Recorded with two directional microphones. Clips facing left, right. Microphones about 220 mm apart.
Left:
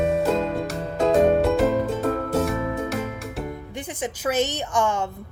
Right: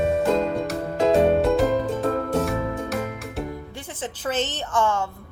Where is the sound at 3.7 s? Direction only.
15° left (ahead or behind).